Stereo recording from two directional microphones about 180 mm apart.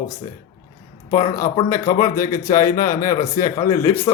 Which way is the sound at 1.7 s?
15° left (ahead or behind).